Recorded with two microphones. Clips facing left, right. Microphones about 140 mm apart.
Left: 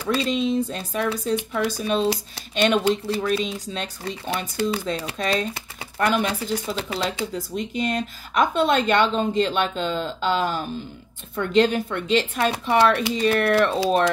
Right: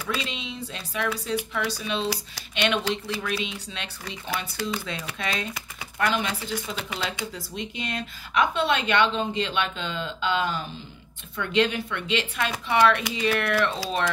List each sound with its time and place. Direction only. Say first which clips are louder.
0.0 s speech: left 9 dB; 35° left (ahead or behind)
7.1 s speech: left 6 dB; 45° left (ahead or behind)